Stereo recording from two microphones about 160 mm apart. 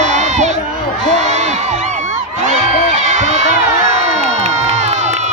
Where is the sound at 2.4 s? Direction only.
45° right (ahead or behind).